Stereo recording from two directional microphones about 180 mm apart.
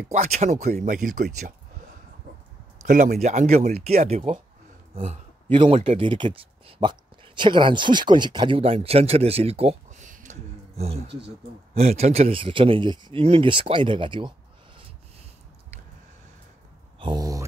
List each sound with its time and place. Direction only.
0.1 s speech: 40° right (ahead or behind)
2.8 s speech: 50° right (ahead or behind)
11.1 s speech: 70° right (ahead or behind)
11.7 s speech: 35° right (ahead or behind)
17.0 s a sound: 20° right (ahead or behind)